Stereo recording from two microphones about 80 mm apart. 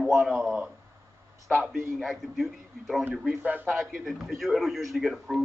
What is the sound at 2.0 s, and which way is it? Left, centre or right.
Speech, centre.